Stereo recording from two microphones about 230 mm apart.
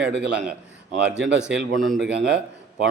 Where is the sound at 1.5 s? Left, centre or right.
Centre.